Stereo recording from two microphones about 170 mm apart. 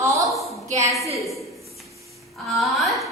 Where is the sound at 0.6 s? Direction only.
45° right (ahead or behind).